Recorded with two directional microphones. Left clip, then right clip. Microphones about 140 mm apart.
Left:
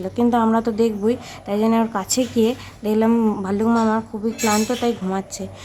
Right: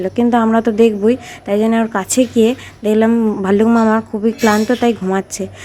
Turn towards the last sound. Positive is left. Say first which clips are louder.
# right 7 dB
turn(degrees=-30)  # may be behind; listen again after turning